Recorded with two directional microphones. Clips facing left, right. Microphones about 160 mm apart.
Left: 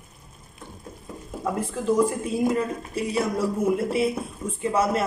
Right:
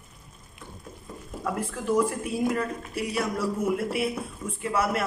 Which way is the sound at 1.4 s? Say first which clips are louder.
Left 4 dB; 20° left (ahead or behind).